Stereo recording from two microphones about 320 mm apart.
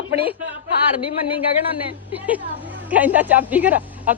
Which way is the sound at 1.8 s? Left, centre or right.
Centre.